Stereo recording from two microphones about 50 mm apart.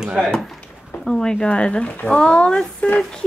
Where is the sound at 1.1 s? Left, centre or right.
Centre.